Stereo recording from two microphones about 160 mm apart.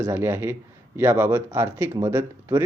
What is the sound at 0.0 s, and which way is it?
Speech, 15° right (ahead or behind).